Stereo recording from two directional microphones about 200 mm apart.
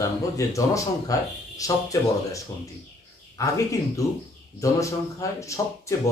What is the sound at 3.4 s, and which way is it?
Speech, 15° left (ahead or behind).